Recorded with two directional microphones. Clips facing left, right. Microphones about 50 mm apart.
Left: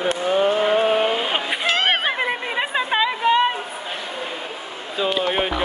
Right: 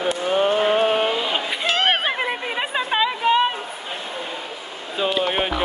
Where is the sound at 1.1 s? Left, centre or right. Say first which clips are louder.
Left 1 dB; left.